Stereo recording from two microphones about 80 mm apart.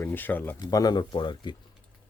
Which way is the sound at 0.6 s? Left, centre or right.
Left.